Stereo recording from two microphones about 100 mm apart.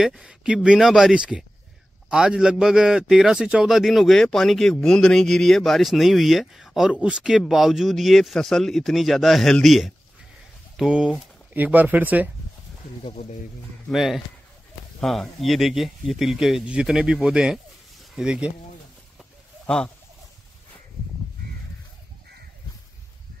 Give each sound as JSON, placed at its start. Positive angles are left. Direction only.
{"t": 0.0, "sound": "speech", "side_deg": -5}
{"t": 13.8, "sound": "speech", "side_deg": -5}
{"t": 19.6, "sound": "speech", "side_deg": 10}